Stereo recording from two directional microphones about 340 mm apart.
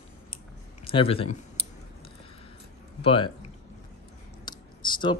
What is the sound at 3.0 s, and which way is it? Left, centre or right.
Speech, centre.